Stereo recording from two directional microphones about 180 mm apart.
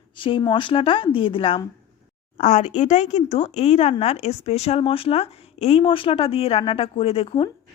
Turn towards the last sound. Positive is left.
turn(degrees=30)  # may be behind; listen again after turning